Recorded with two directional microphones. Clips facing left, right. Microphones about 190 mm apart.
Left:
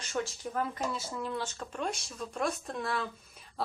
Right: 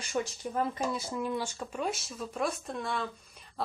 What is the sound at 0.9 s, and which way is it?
Speech, 15° right (ahead or behind).